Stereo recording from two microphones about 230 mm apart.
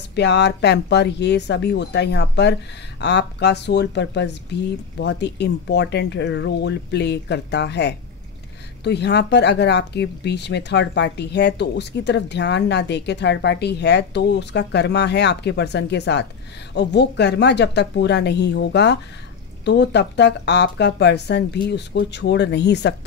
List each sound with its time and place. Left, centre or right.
0.1 s speech: left